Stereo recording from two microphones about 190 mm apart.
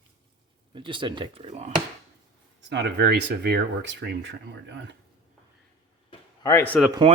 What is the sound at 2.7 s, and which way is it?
Speech, 65° right (ahead or behind).